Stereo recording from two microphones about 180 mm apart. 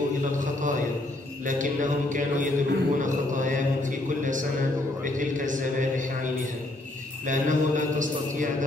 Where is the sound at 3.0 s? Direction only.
45° right (ahead or behind).